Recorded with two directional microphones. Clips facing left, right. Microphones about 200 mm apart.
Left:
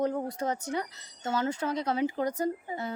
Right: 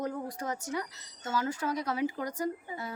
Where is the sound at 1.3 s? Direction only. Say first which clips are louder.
Left 2 dB; 25° left (ahead or behind).